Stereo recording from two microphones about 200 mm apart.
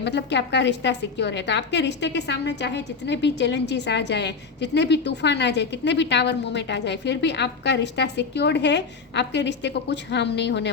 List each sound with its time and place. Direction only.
0.0 s a woman's voice: 60° left (ahead or behind)